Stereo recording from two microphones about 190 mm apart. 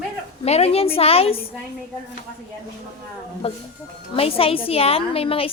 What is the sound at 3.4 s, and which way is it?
A woman's voice, 30° left (ahead or behind).